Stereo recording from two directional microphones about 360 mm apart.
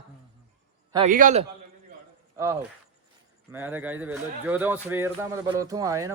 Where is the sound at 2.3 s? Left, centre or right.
Centre.